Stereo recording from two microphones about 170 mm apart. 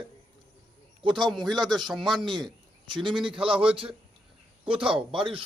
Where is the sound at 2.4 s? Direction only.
25° right (ahead or behind).